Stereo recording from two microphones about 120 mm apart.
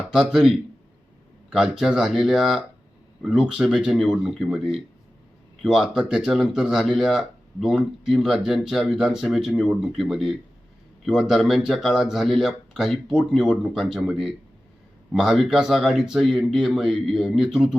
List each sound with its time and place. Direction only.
0.1 s speech: 5° right (ahead or behind)